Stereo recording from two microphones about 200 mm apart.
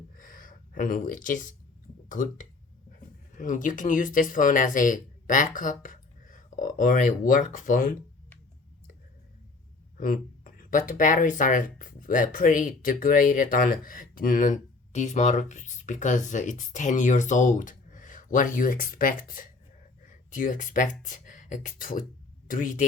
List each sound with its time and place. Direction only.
0.2 s a sound: 40° left (ahead or behind)
2.0 s speech: 40° left (ahead or behind)
10.0 s speech: 45° left (ahead or behind)